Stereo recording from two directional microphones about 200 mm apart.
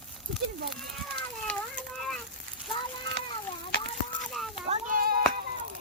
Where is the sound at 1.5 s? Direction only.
5° left (ahead or behind).